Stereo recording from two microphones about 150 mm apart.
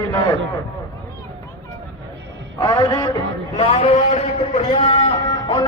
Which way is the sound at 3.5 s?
45° left (ahead or behind).